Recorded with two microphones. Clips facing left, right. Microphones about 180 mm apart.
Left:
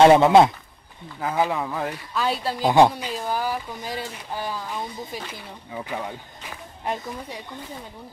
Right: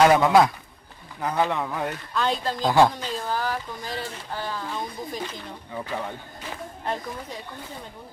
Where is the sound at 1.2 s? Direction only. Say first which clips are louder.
Left 1 dB; 5° left (ahead or behind).